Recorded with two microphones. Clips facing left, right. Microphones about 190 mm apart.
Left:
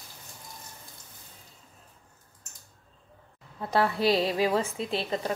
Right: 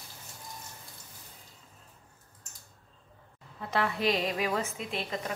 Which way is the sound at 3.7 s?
35° left (ahead or behind).